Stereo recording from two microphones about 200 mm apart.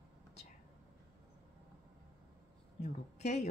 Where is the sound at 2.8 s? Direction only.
35° left (ahead or behind).